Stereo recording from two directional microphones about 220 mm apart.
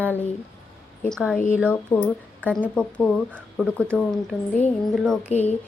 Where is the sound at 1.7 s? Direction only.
10° left (ahead or behind).